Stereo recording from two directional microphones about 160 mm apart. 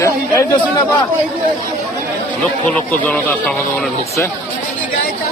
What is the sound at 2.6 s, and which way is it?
A man's voice, 10° left (ahead or behind).